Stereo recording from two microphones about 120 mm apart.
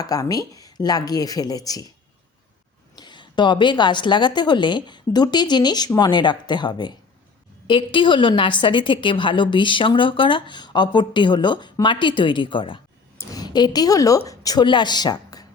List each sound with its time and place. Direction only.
0.0 s a woman's voice: 30° left (ahead or behind)
2.9 s a woman's voice: 40° left (ahead or behind)